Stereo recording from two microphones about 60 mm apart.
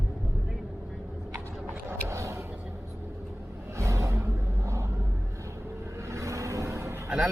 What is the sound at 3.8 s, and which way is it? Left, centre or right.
Vehicle, right.